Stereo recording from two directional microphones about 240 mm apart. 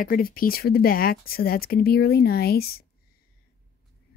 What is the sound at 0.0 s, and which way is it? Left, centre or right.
Speech, left.